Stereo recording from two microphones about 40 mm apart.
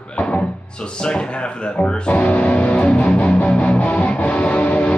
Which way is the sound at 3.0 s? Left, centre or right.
Left.